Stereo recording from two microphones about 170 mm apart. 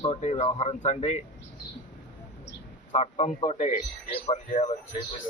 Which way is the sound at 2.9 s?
40° left (ahead or behind).